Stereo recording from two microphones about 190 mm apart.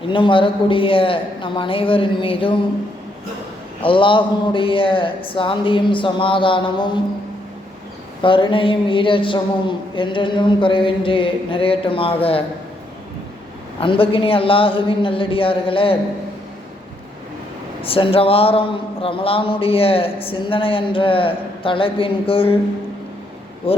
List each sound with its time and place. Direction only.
0.1 s speech: 25° left (ahead or behind)
3.8 s speech: 25° left (ahead or behind)
8.2 s speech: 25° left (ahead or behind)
13.7 s speech: 25° left (ahead or behind)
17.8 s speech: 30° left (ahead or behind)
23.6 s speech: 30° left (ahead or behind)